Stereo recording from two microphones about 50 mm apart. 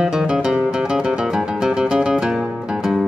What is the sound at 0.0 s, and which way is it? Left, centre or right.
Music, centre.